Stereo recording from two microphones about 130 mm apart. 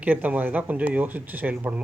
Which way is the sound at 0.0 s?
15° right (ahead or behind).